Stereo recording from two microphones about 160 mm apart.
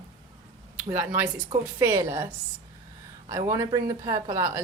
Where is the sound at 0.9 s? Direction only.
15° right (ahead or behind).